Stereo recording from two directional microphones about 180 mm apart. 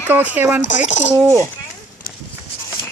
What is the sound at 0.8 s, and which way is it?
Speech, 40° left (ahead or behind).